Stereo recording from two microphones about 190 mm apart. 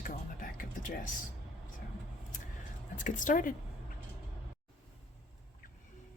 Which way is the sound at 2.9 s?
40° left (ahead or behind).